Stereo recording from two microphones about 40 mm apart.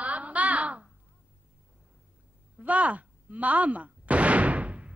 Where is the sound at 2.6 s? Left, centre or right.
Right.